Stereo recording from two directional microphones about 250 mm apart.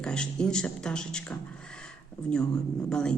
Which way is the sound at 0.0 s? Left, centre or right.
Centre.